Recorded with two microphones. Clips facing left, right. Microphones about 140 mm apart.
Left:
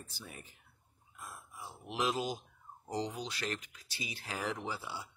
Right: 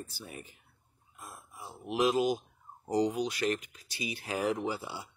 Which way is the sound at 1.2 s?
15° right (ahead or behind).